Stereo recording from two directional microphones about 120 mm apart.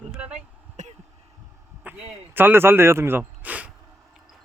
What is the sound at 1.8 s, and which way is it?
Speech, 15° right (ahead or behind).